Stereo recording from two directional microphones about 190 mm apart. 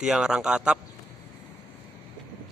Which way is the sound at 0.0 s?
5° right (ahead or behind).